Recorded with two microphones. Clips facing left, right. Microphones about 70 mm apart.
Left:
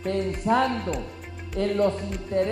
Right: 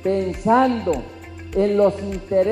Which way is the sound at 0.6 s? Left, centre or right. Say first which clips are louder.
Right 7 dB; centre.